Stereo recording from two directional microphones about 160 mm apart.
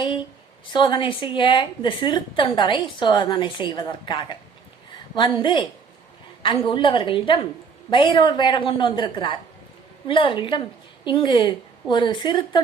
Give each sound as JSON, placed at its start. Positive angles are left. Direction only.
{"t": 0.7, "sound": "a woman's voice", "side_deg": 30}